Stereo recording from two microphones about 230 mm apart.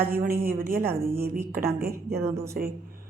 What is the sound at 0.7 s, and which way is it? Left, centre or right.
Speech, centre.